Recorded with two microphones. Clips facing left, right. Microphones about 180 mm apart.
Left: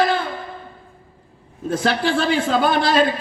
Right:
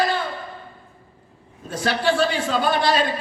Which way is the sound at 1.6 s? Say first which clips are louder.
Left 2 dB; 55° left (ahead or behind).